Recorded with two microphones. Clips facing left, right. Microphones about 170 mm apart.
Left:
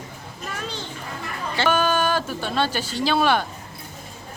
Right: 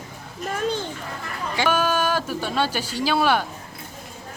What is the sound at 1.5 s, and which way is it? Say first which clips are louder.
A woman's voice: left 1 dB; 10° right (ahead or behind).